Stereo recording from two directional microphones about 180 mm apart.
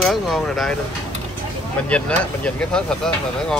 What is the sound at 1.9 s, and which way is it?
Speech, 5° left (ahead or behind).